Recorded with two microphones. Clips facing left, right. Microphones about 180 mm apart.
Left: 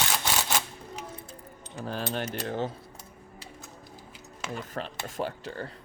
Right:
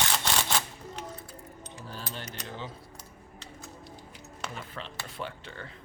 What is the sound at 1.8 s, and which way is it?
Speech, 70° left (ahead or behind).